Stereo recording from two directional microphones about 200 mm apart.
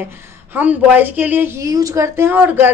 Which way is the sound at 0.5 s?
10° right (ahead or behind).